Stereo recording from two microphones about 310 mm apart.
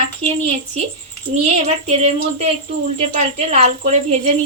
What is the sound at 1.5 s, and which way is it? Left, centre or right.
Speech, right.